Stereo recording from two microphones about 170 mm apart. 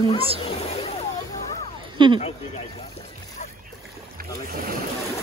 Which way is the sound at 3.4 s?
40° left (ahead or behind).